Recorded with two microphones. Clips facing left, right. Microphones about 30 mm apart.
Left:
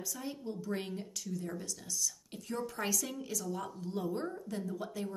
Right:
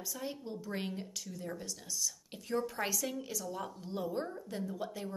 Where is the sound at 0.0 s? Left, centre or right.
Centre.